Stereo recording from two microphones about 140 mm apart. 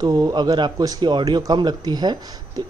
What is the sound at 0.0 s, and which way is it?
A man's voice, 30° right (ahead or behind).